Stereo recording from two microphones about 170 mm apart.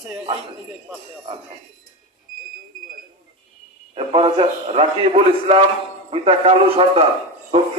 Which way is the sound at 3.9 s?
35° right (ahead or behind).